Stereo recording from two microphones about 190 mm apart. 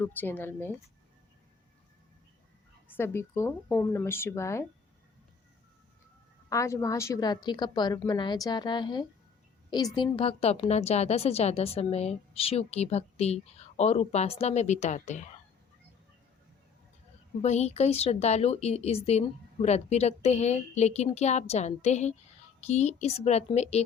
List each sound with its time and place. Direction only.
0.0 s speech: 10° left (ahead or behind)
2.9 s speech: 10° left (ahead or behind)
6.5 s a woman's voice: 15° left (ahead or behind); by 15.3 s 40° left (ahead or behind)
17.4 s a woman's voice: 35° left (ahead or behind)